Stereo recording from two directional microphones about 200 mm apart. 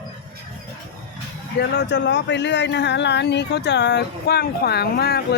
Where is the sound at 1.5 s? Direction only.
55° left (ahead or behind).